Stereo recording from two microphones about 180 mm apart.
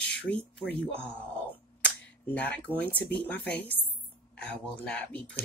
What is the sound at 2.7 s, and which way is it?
Speech, 10° left (ahead or behind).